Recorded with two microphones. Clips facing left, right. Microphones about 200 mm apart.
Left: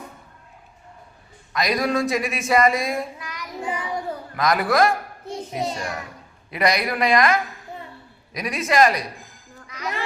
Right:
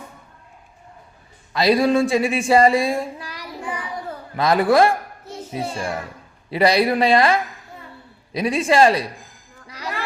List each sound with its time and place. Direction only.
1.5 s female singing: 30° right (ahead or behind)
3.6 s child singing: 20° left (ahead or behind)
4.4 s female singing: 30° right (ahead or behind)
9.6 s music: 35° right (ahead or behind)